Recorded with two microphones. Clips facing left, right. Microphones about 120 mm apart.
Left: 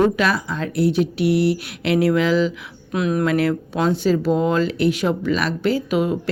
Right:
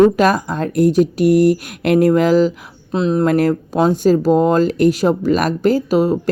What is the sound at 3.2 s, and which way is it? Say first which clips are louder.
Speech: right 4 dB; 45° right (ahead or behind).